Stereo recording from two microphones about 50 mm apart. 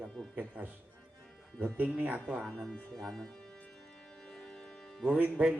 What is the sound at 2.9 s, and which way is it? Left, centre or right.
Speech, centre.